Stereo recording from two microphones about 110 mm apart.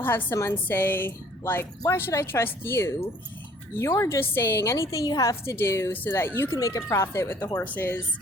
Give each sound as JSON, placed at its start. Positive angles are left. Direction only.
{"t": 0.0, "sound": "a woman's voice", "side_deg": 20}